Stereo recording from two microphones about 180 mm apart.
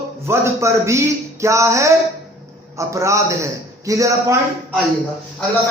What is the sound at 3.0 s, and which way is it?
Speech, 15° right (ahead or behind).